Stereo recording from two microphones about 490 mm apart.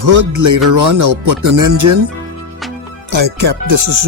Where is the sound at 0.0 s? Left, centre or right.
Right.